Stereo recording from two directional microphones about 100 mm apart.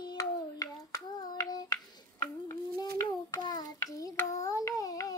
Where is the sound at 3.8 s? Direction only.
35° left (ahead or behind).